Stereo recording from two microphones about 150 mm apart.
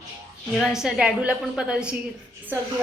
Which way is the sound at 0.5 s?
Centre (ahead or behind).